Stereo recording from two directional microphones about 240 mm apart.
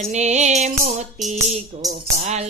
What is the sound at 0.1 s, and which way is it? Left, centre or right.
Music, right.